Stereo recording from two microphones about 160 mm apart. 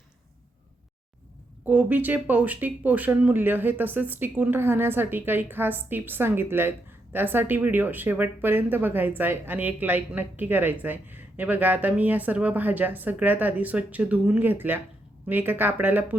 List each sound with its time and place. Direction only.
1.6 s speech: 10° right (ahead or behind)